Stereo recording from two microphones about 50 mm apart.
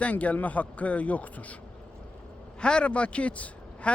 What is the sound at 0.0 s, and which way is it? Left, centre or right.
A man's voice, left.